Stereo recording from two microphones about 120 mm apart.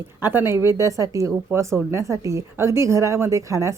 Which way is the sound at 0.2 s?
20° right (ahead or behind).